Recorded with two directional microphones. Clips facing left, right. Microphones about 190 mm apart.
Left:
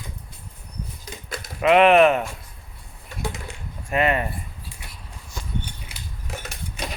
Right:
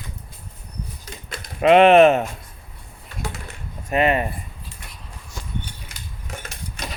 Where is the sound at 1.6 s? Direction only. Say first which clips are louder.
Right 3 dB; 30° right (ahead or behind).